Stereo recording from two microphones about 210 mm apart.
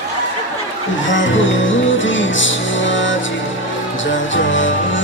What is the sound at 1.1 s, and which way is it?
Music, 65° left (ahead or behind).